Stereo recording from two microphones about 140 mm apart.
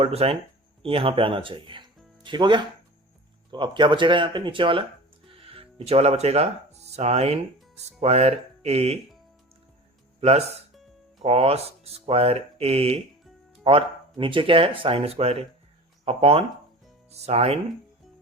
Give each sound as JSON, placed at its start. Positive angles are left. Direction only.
{"t": 0.0, "sound": "speech", "side_deg": -45}
{"t": 10.2, "sound": "speech", "side_deg": -50}